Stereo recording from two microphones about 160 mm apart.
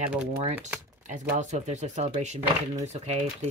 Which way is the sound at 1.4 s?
50° right (ahead or behind).